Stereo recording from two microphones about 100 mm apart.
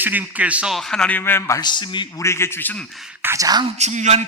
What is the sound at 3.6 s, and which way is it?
Speech, 90° right.